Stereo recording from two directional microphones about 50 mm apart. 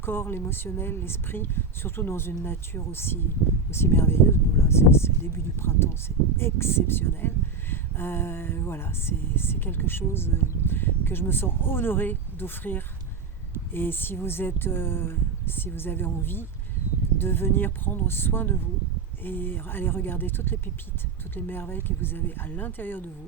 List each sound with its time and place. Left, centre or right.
0.0 s speech: left